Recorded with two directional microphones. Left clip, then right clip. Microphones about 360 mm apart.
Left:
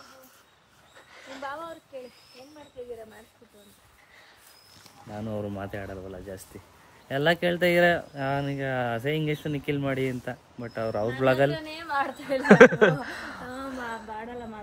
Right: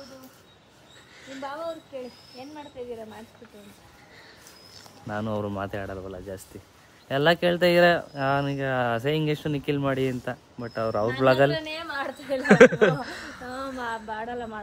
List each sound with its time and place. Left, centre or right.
1.1 s a sound: centre
5.2 s speech: centre
11.5 s a woman's voice: right
12.3 s speech: centre